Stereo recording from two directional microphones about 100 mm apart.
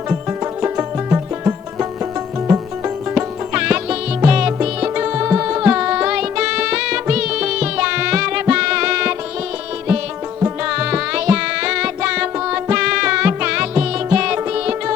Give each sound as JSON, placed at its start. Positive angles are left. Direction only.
{"t": 0.3, "sound": "music", "side_deg": -25}
{"t": 3.5, "sound": "music", "side_deg": -10}
{"t": 10.6, "sound": "music", "side_deg": -10}